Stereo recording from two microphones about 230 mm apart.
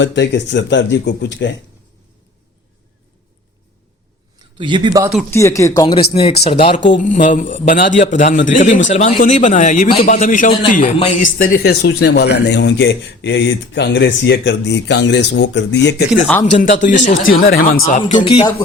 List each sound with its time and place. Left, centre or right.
0.0 s a man's voice: left
4.4 s speech: centre
5.3 s speech: centre
6.9 s a man's voice: left
16.0 s speech: centre
16.5 s speech: left
18.1 s speech: left